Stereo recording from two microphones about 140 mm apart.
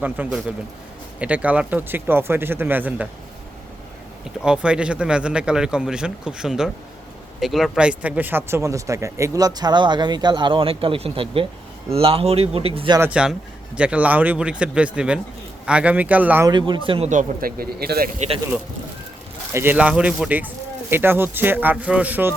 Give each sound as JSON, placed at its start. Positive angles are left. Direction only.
{"t": 0.0, "sound": "a man's voice", "side_deg": -10}
{"t": 4.4, "sound": "a man's voice", "side_deg": -5}
{"t": 13.0, "sound": "a man's voice", "side_deg": -10}
{"t": 16.5, "sound": "a man's voice", "side_deg": -35}
{"t": 17.1, "sound": "speech", "side_deg": -75}
{"t": 19.5, "sound": "a man's voice", "side_deg": -10}